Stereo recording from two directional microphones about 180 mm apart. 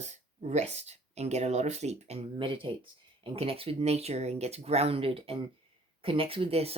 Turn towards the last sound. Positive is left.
turn(degrees=-35)  # may be behind; listen again after turning